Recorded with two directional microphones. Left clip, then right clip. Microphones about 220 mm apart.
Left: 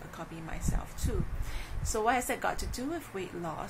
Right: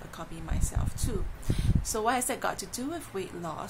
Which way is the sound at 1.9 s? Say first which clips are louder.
Even; 10° right (ahead or behind).